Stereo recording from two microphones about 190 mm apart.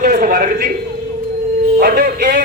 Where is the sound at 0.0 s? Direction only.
50° right (ahead or behind).